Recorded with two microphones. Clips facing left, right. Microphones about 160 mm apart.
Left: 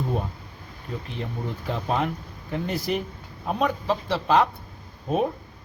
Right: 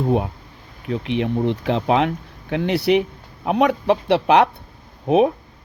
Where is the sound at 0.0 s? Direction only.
70° right (ahead or behind).